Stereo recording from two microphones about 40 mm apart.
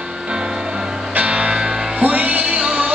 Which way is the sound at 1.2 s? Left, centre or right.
Right.